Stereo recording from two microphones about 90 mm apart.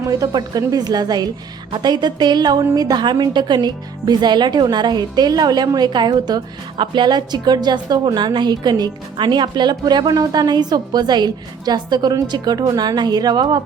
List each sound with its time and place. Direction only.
0.1 s a woman's voice: 45° right (ahead or behind)